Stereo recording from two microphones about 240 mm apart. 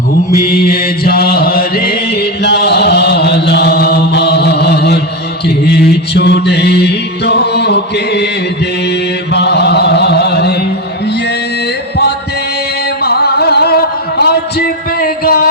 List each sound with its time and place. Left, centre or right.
0.3 s mantra: left
13.0 s music: left